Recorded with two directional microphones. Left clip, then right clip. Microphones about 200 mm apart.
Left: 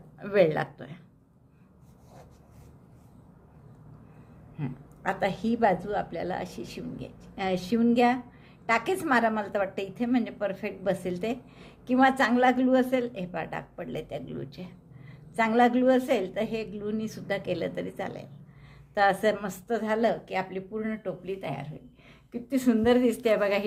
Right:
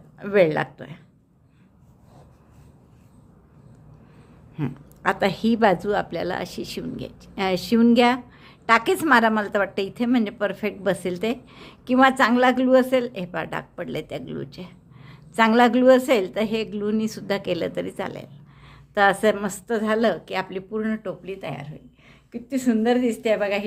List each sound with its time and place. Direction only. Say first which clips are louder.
0.2 s speech: right 4 dB; 15° right (ahead or behind)
4.5 s a woman's voice: right 8 dB; 35° right (ahead or behind); by 23.6 s centre (ahead or behind)